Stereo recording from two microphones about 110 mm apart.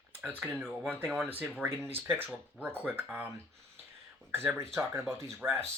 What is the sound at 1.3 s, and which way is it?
Speech, 15° right (ahead or behind).